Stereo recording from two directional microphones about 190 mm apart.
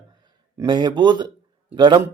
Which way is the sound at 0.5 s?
25° right (ahead or behind).